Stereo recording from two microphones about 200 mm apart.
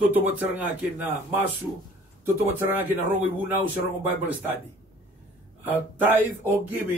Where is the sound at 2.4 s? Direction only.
10° right (ahead or behind).